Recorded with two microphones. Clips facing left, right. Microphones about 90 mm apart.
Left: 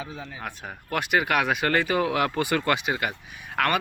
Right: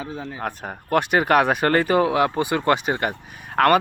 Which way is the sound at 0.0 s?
35° right (ahead or behind).